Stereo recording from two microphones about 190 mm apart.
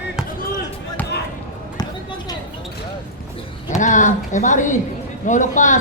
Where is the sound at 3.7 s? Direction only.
40° left (ahead or behind).